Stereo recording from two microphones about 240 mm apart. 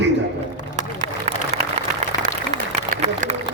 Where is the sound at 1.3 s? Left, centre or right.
Right.